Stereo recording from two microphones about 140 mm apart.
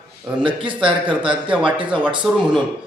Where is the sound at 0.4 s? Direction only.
35° right (ahead or behind).